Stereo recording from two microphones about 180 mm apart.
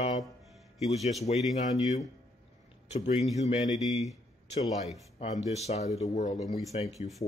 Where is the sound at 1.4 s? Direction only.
Centre (ahead or behind).